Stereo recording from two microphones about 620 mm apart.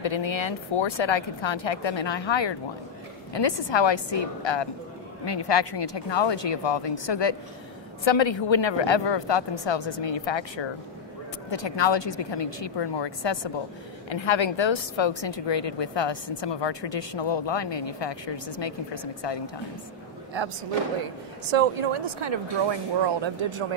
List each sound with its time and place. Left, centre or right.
0.0 s a woman's voice: left
19.2 s a woman's voice: left
21.5 s speech: right